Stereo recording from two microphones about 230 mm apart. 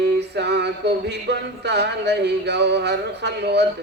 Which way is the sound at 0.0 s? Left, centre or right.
Right.